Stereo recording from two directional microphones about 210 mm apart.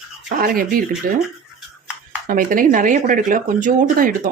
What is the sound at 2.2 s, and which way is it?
Speech, 40° right (ahead or behind).